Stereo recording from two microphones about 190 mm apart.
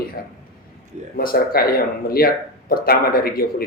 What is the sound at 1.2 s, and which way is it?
Speech, 50° left (ahead or behind).